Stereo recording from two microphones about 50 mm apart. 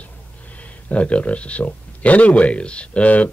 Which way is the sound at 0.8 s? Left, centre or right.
Left.